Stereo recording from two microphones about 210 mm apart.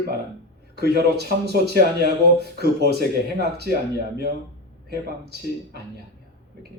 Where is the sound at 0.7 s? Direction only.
50° right (ahead or behind).